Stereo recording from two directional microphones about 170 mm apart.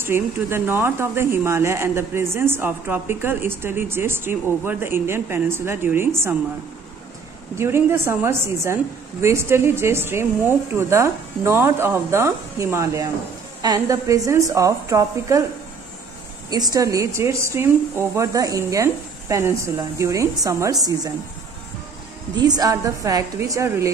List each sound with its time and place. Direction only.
0.0 s speech: 15° right (ahead or behind)
7.5 s speech: 15° right (ahead or behind)
16.4 s speech: 20° right (ahead or behind)
22.4 s speech: 25° right (ahead or behind)